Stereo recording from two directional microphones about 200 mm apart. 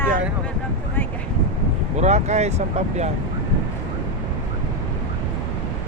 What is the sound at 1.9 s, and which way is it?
Speech, 35° right (ahead or behind).